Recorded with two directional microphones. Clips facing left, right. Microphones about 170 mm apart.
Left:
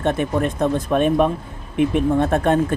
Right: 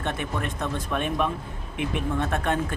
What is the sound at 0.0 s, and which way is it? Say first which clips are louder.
Speech: left 10 dB; 40° left (ahead or behind).